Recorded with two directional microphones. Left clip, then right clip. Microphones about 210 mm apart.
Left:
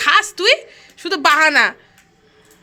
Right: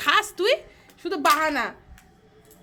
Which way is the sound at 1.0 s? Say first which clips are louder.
Left 8 dB; 20° left (ahead or behind).